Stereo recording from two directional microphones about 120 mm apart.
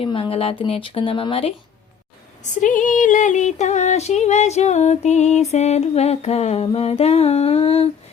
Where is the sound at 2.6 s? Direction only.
90° left.